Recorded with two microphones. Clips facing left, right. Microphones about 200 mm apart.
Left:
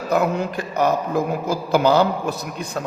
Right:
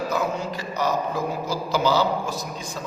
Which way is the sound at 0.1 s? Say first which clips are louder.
Left 5 dB; 60° left (ahead or behind).